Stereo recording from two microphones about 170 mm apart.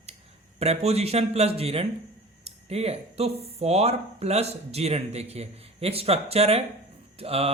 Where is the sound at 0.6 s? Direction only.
40° right (ahead or behind).